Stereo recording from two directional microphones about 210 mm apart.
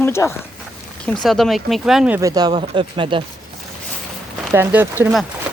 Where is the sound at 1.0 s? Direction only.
Centre (ahead or behind); by 3.2 s 25° right (ahead or behind).